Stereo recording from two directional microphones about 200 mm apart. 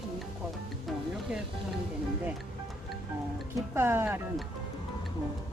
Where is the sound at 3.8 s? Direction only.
10° right (ahead or behind).